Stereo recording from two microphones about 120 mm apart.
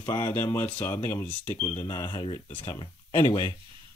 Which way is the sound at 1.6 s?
40° left (ahead or behind).